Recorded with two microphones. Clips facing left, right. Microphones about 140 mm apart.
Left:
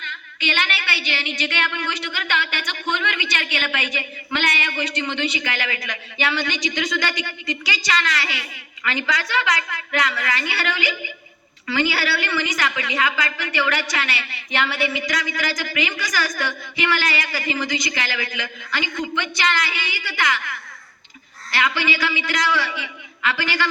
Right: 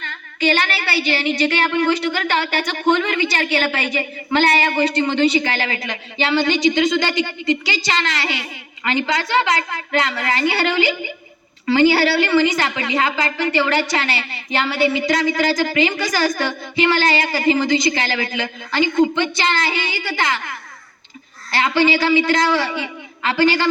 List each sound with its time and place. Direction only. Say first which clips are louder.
0.0 s a woman's voice: right 9 dB; 40° right (ahead or behind)